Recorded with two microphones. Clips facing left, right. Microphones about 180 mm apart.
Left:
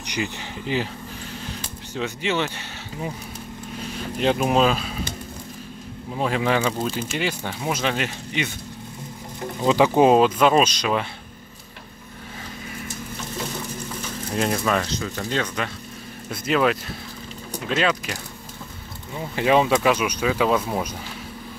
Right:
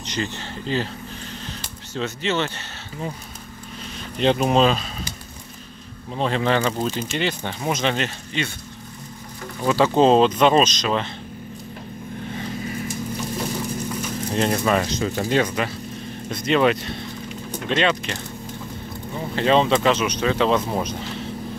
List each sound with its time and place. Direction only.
0.0 s speech: 15° left (ahead or behind)
2.0 s speech: 15° left (ahead or behind)
4.2 s speech: 5° left (ahead or behind)
6.1 s speech: 10° left (ahead or behind)
14.3 s speech: centre (ahead or behind)
14.9 s speech: 20° right (ahead or behind)
16.3 s speech: 5° left (ahead or behind)
19.3 s speech: 10° left (ahead or behind)